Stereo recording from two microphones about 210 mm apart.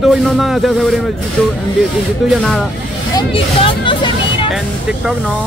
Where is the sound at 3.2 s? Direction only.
20° left (ahead or behind).